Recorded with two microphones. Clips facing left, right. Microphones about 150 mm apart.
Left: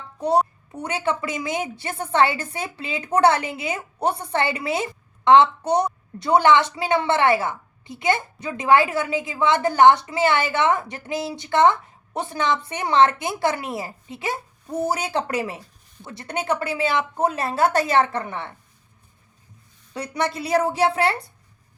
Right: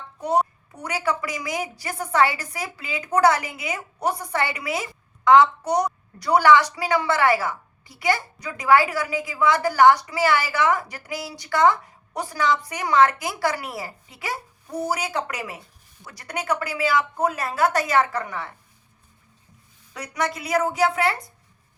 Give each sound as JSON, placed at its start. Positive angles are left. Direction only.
{"t": 0.8, "sound": "a woman's voice", "side_deg": 25}
{"t": 19.9, "sound": "a woman's voice", "side_deg": 30}